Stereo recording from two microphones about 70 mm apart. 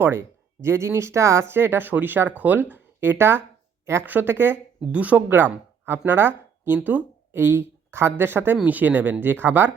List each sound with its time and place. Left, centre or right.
0.0 s speech: right
4.8 s speech: centre
5.3 s speech: right